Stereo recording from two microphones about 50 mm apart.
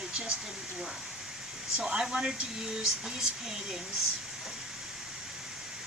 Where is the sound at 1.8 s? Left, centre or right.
Centre.